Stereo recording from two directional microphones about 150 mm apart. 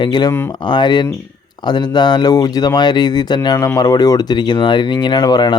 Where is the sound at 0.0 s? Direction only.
30° left (ahead or behind).